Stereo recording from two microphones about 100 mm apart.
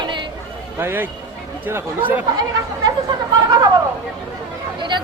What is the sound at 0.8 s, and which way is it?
Speech, 25° right (ahead or behind).